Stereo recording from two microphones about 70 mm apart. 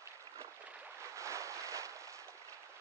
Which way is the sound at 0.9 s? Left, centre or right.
Right.